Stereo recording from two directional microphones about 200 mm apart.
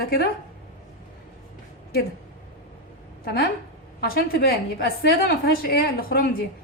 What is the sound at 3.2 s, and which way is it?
A woman's voice, 50° left (ahead or behind).